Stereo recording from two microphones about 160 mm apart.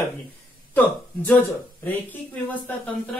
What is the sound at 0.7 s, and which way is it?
Speech, 5° left (ahead or behind).